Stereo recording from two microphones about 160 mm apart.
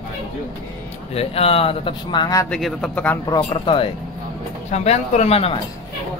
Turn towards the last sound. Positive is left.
turn(degrees=40)  # may be behind; listen again after turning